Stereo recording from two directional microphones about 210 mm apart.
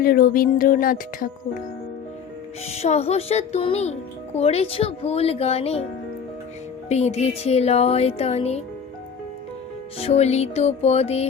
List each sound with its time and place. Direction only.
0.0 s speech: 45° left (ahead or behind)
2.6 s a woman's voice: 30° left (ahead or behind)
6.8 s speech: 30° left (ahead or behind)
10.0 s speech: 30° left (ahead or behind)